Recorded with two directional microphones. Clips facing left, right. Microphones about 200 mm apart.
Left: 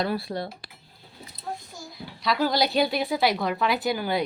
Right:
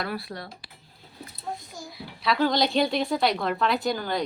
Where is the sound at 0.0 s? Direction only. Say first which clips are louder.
Left 5 dB; 25° left (ahead or behind).